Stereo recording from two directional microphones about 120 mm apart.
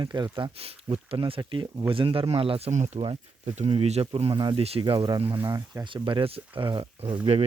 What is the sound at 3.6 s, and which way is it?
Speech, 60° right (ahead or behind).